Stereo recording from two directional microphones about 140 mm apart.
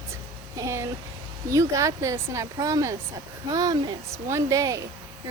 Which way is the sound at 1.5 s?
20° right (ahead or behind).